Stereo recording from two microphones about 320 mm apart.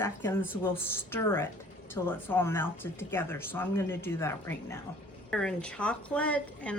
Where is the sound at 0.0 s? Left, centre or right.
Centre.